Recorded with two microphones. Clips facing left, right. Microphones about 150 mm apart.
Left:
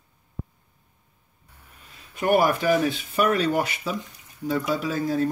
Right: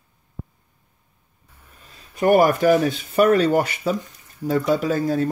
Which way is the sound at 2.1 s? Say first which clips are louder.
Right 5 dB; 45° right (ahead or behind).